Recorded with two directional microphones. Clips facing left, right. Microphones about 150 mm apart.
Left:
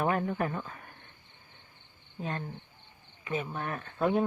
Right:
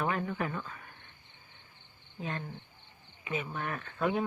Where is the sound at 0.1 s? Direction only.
40° left (ahead or behind).